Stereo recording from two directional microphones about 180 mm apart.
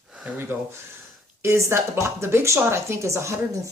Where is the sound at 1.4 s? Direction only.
15° right (ahead or behind).